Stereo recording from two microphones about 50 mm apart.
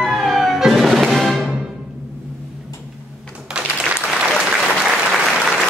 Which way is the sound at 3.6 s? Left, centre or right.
Right.